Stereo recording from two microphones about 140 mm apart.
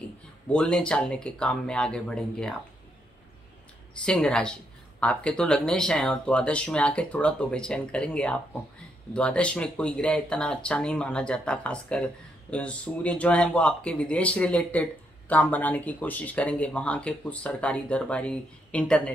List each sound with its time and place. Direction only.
0.5 s speech: 5° left (ahead or behind)
4.0 s speech: 5° left (ahead or behind)